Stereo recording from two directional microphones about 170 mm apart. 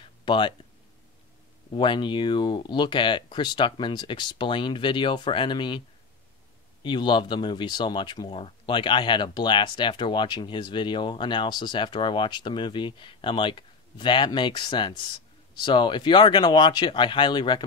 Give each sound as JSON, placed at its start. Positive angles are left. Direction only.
{"t": 0.0, "sound": "a sound", "side_deg": 30}
{"t": 1.7, "sound": "speech", "side_deg": 30}
{"t": 6.8, "sound": "speech", "side_deg": 25}